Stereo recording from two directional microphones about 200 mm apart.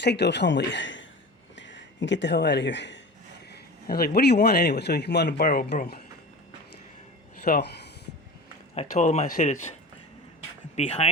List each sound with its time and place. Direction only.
0.0 s a man's voice: 55° left (ahead or behind)
3.5 s a man's voice: 50° left (ahead or behind)
7.4 s speech: 50° left (ahead or behind)
8.7 s speech: 35° left (ahead or behind)
10.8 s speech: 30° left (ahead or behind)